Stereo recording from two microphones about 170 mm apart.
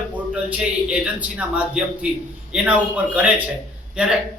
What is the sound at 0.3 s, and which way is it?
A man's voice, 5° right (ahead or behind).